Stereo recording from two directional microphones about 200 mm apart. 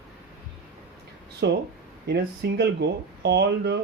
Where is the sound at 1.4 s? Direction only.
60° right (ahead or behind).